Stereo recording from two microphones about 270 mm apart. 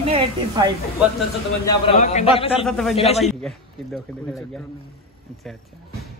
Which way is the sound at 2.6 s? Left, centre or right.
Centre.